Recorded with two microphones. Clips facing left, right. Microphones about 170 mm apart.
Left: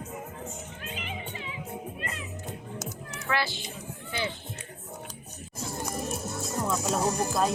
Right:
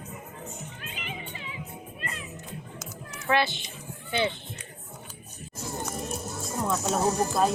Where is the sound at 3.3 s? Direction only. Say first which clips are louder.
Right 5 dB; 20° right (ahead or behind).